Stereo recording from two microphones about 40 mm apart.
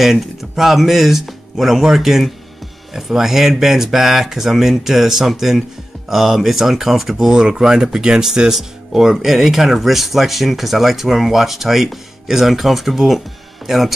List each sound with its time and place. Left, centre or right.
0.0 s speech: centre